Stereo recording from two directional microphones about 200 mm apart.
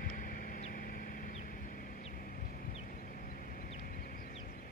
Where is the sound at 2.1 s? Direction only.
50° left (ahead or behind).